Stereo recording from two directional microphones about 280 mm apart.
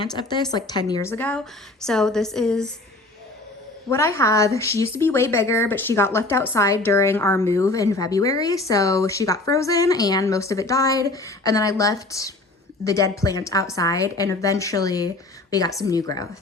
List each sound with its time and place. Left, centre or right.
0.0 s a woman's voice: centre
3.8 s a woman's voice: centre